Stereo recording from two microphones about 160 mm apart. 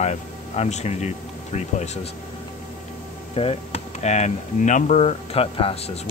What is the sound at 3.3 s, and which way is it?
Speech, 40° left (ahead or behind).